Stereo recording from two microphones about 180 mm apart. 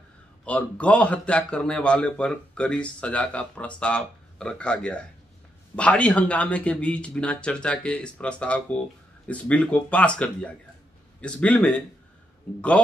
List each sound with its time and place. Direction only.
0.5 s a man's voice: 5° left (ahead or behind)